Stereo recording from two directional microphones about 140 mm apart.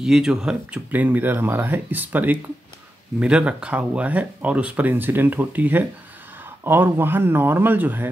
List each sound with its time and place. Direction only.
0.0 s speech: 5° right (ahead or behind)